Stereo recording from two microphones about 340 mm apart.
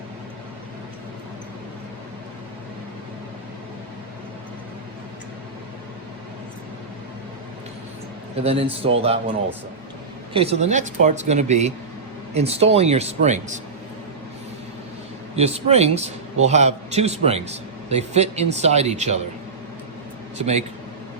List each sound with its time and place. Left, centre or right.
8.4 s a man's voice: centre
10.3 s a man's voice: centre
15.4 s a man's voice: centre